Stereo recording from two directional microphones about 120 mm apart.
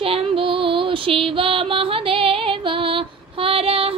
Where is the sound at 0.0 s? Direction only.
50° right (ahead or behind).